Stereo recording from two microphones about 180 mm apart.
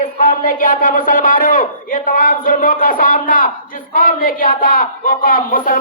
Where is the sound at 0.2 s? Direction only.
50° left (ahead or behind).